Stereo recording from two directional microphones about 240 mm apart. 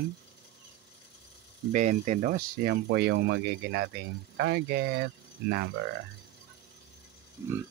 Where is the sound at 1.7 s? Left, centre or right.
Right.